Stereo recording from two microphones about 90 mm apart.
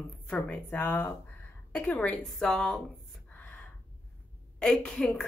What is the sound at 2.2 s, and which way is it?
Speech, 5° left (ahead or behind).